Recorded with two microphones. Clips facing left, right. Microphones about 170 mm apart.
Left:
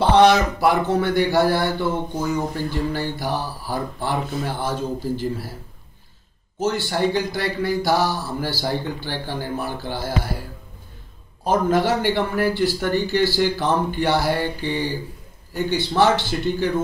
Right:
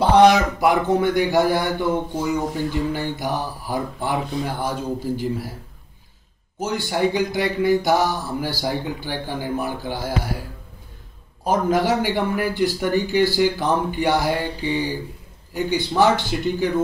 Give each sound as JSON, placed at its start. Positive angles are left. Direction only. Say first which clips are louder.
{"t": 0.0, "sound": "speech", "louder": "right 1 dB", "side_deg": -10}
{"t": 4.2, "sound": "speech", "louder": "right 1 dB", "side_deg": 0}
{"t": 4.5, "sound": "speech", "louder": "even", "side_deg": -15}
{"t": 6.6, "sound": "speech", "louder": "even", "side_deg": -15}
{"t": 11.4, "sound": "speech", "louder": "even", "side_deg": -10}